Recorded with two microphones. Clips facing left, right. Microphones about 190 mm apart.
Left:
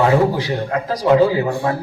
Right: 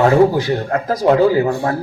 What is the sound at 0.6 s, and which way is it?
Speech, 45° right (ahead or behind).